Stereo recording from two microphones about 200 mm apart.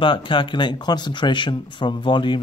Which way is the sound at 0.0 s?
25° left (ahead or behind).